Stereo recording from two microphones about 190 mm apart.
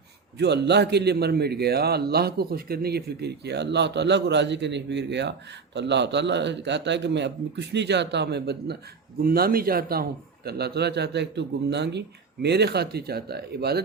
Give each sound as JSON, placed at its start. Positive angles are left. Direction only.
{"t": 0.3, "sound": "a man's voice", "side_deg": -65}